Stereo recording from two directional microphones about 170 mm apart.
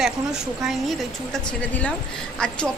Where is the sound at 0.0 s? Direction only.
5° right (ahead or behind).